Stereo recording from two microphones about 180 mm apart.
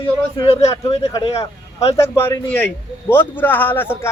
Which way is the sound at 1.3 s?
35° left (ahead or behind).